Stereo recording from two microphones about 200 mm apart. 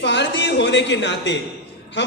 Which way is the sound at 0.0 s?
60° left (ahead or behind).